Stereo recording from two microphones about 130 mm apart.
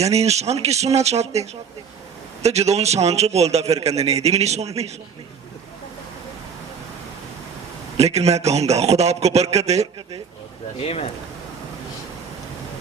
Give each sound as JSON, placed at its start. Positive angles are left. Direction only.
{"t": 0.0, "sound": "a man's voice", "side_deg": -55}
{"t": 7.9, "sound": "a man's voice", "side_deg": -55}
{"t": 10.8, "sound": "speech", "side_deg": 50}